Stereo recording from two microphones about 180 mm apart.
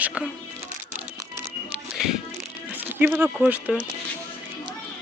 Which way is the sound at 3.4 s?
5° right (ahead or behind).